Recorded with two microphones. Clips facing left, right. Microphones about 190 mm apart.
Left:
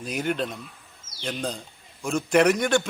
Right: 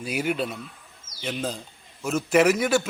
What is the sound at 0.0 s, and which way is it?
A man's voice, 5° right (ahead or behind).